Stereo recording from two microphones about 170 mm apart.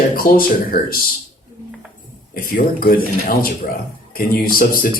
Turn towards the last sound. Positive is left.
turn(degrees=55)  # may be behind; listen again after turning